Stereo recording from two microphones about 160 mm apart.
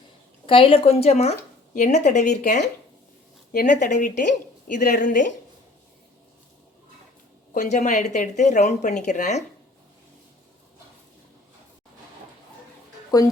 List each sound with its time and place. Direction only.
0.4 s speech: 35° left (ahead or behind)
3.5 s speech: 60° left (ahead or behind)
7.5 s speech: 50° left (ahead or behind)
13.1 s a woman's voice: 25° left (ahead or behind)